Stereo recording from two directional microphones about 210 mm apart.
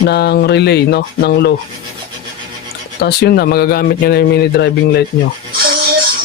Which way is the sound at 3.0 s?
50° left (ahead or behind).